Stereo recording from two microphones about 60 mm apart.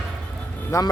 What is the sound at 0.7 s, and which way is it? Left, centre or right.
Speech, left.